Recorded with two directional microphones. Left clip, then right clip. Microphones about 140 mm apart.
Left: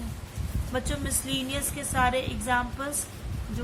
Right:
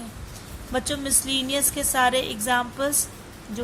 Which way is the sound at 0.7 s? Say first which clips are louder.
Right 5 dB; 55° right (ahead or behind).